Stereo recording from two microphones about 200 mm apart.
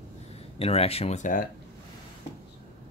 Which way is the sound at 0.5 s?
30° left (ahead or behind).